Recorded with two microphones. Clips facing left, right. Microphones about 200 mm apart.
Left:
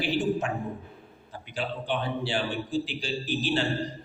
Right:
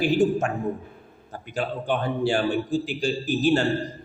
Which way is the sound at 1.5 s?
45° right (ahead or behind).